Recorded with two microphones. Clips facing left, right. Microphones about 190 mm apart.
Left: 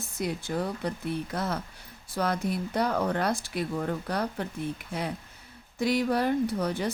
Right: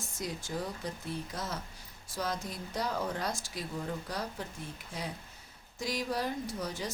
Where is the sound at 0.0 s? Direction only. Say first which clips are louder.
Left 7 dB; 60° left (ahead or behind).